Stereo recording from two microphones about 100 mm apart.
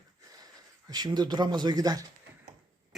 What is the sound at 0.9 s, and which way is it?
Speech, 40° right (ahead or behind).